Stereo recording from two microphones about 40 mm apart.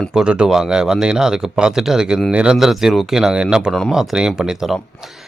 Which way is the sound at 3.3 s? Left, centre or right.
Right.